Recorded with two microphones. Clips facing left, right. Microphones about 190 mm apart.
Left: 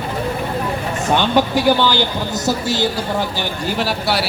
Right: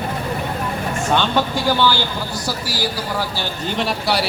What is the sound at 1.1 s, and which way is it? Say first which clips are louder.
A man's voice: left 4 dB; 15° left (ahead or behind).